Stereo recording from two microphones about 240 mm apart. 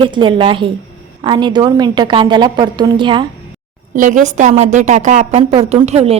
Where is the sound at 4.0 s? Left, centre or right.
Right.